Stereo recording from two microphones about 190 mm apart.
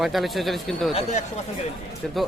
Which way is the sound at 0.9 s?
30° left (ahead or behind).